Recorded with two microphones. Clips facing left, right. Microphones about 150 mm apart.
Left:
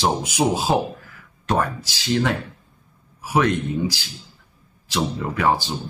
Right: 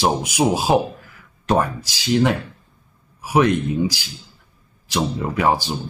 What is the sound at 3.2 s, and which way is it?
Speech, 15° right (ahead or behind).